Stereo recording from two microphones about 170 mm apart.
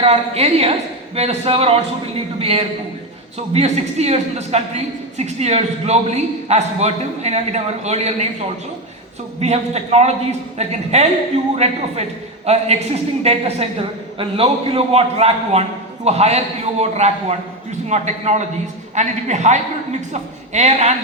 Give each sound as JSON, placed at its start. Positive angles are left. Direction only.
{"t": 0.0, "sound": "a woman's voice", "side_deg": -35}
{"t": 9.4, "sound": "a woman's voice", "side_deg": -40}